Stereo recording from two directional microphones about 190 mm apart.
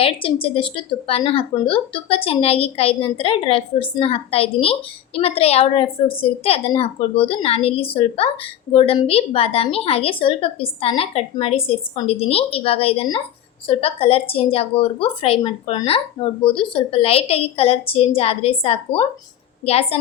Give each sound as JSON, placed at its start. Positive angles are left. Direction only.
{"t": 0.0, "sound": "a woman's voice", "side_deg": 30}